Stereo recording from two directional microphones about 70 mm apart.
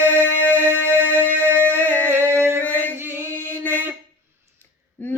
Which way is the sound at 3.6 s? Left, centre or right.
Right.